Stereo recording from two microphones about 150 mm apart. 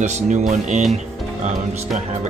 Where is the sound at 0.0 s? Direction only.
50° right (ahead or behind).